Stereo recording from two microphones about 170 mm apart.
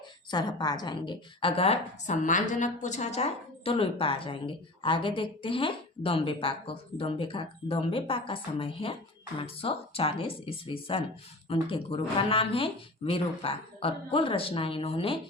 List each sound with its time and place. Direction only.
0.3 s a woman's voice: 25° left (ahead or behind)